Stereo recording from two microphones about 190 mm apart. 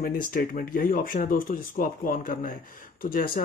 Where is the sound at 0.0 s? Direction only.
50° left (ahead or behind).